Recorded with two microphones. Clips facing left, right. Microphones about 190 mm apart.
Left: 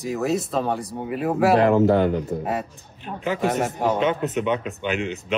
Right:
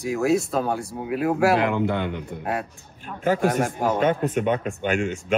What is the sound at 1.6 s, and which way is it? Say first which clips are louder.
Speech: left 6 dB; 40° left (ahead or behind).